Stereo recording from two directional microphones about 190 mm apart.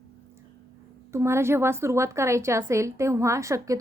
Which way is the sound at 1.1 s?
15° right (ahead or behind).